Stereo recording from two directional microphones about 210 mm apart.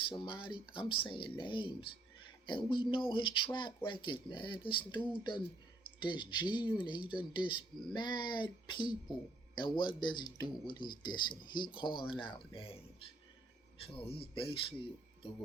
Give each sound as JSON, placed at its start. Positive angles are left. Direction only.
{"t": 0.1, "sound": "speech", "side_deg": 25}
{"t": 13.8, "sound": "speech", "side_deg": 25}